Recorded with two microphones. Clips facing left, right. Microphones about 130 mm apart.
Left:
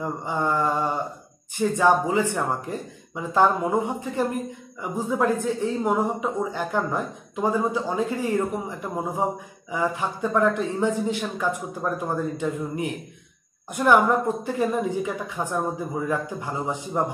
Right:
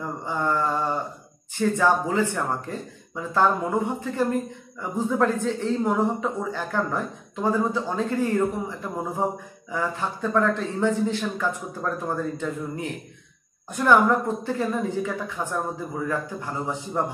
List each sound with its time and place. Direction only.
0.0 s speech: 15° left (ahead or behind)